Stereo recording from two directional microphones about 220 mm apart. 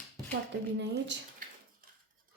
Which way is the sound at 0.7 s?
50° right (ahead or behind).